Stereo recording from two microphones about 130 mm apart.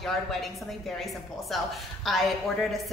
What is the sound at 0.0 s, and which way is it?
A woman's voice, centre (ahead or behind).